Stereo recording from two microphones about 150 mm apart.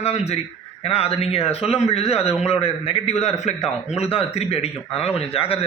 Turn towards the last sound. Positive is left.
turn(degrees=40)  # may be behind; listen again after turning